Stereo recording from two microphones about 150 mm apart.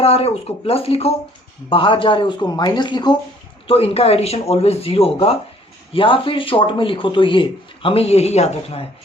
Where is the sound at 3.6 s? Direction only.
40° left (ahead or behind).